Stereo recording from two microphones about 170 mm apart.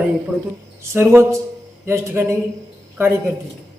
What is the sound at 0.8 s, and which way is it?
A man's voice, 15° right (ahead or behind).